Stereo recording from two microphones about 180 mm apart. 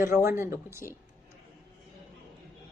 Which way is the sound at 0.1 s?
55° left (ahead or behind).